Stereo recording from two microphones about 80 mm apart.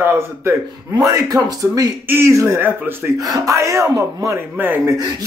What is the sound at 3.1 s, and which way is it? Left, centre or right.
Speech, right.